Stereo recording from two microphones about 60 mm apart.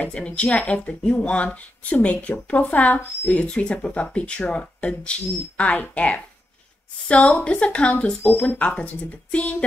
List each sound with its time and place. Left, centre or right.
0.0 s speech: centre